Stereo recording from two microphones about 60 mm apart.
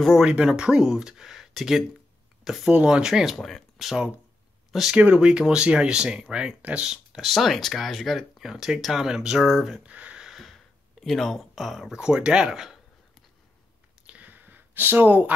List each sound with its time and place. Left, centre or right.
0.2 s speech: centre
2.7 s speech: centre
3.3 s speech: centre
3.7 s speech: centre
7.2 s speech: centre
9.8 s a sound: right
10.2 s speech: centre
14.0 s a sound: right